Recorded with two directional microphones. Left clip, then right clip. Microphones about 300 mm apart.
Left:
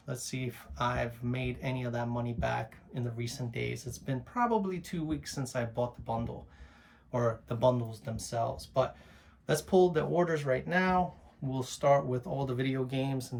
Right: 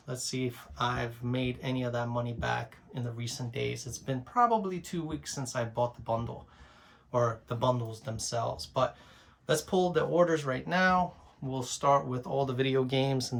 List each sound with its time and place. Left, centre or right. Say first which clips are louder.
0.1 s speech: right 4 dB; centre
7.2 s speech: even; centre; by 13.2 s right